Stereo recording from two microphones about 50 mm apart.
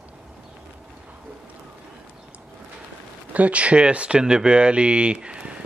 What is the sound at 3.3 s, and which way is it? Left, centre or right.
Speech, right.